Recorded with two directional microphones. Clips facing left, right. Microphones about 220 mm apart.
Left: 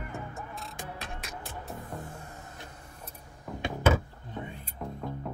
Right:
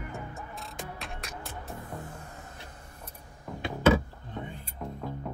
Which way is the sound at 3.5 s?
Centre (ahead or behind).